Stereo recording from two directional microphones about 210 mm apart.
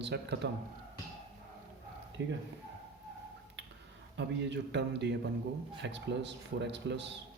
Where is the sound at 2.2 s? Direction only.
60° right (ahead or behind).